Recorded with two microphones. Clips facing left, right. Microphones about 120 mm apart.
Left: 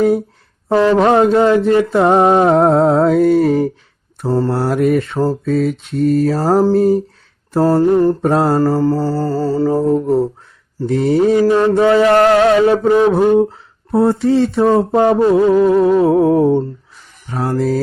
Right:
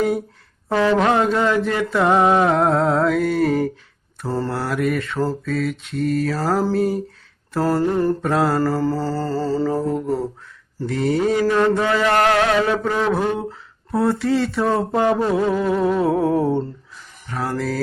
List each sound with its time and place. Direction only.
0.7 s mantra: 35° left (ahead or behind)
7.8 s music: 20° left (ahead or behind)
8.2 s mantra: 35° left (ahead or behind)
8.6 s mantra: 15° left (ahead or behind)
9.7 s music: 25° left (ahead or behind)
10.8 s mantra: 30° left (ahead or behind)
13.0 s speech: 20° left (ahead or behind)
15.3 s mantra: 20° left (ahead or behind)
15.6 s music: 25° left (ahead or behind)